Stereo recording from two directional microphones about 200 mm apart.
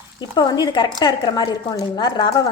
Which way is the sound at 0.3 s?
20° left (ahead or behind).